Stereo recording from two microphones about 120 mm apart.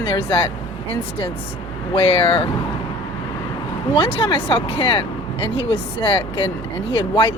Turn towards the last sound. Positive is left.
turn(degrees=45)  # may be behind; listen again after turning